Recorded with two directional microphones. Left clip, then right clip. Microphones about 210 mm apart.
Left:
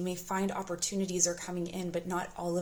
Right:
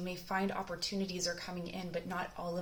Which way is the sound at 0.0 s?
45° left (ahead or behind).